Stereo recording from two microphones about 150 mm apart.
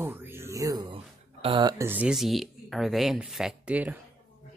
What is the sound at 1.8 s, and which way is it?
Speech, 10° right (ahead or behind).